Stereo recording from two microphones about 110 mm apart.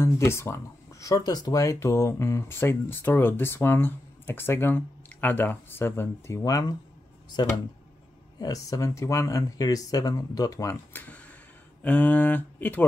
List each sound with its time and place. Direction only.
0.0 s speech: 25° left (ahead or behind)
10.9 s a sound: 15° left (ahead or behind)
11.8 s speech: 15° left (ahead or behind)